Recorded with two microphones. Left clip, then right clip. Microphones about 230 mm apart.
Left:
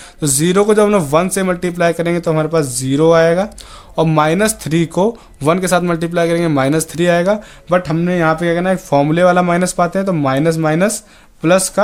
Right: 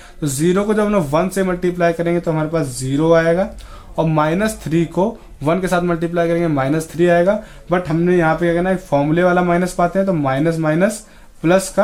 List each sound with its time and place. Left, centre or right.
0.2 s speech: left